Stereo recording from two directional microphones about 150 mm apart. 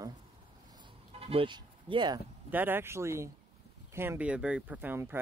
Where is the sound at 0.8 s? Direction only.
40° right (ahead or behind).